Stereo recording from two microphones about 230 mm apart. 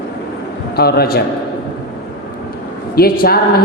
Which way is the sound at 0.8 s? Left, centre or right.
Left.